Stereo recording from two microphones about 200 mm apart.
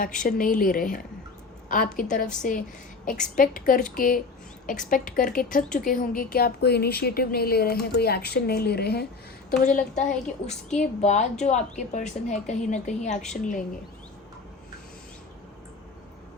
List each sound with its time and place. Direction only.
0.0 s a woman's voice: 40° left (ahead or behind)
2.0 s a woman's voice: 45° left (ahead or behind)
9.5 s a woman's voice: 40° left (ahead or behind)